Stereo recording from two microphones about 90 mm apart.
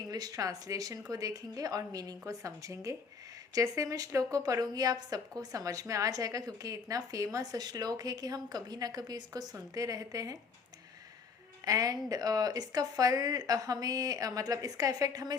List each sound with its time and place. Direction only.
0.1 s a woman's voice: 45° right (ahead or behind)
11.6 s speech: 45° right (ahead or behind)